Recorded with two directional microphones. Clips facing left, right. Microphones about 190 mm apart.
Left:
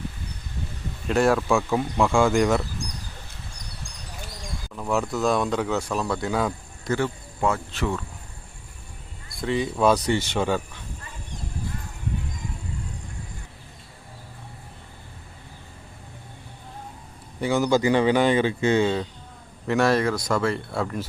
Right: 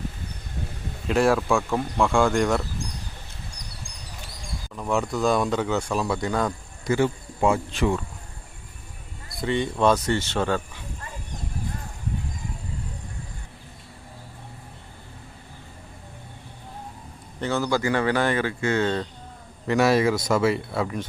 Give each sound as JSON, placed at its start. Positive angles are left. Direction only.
{"t": 1.0, "sound": "speech", "side_deg": 0}
{"t": 4.7, "sound": "speech", "side_deg": 0}
{"t": 6.9, "sound": "speech", "side_deg": -15}
{"t": 9.3, "sound": "speech", "side_deg": 0}
{"t": 17.4, "sound": "speech", "side_deg": 15}
{"t": 18.8, "sound": "speech", "side_deg": 10}
{"t": 19.6, "sound": "speech", "side_deg": -5}